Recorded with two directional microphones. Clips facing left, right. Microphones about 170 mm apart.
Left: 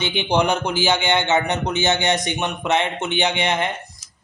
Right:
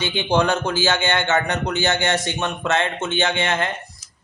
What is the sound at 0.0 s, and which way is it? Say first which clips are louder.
Speech: even; 15° left (ahead or behind).